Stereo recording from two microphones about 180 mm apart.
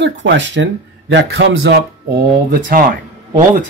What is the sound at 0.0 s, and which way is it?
Speech, 80° right.